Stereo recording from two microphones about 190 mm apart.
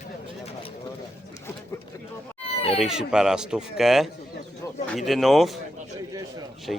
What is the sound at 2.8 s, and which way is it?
Speech, 5° right (ahead or behind).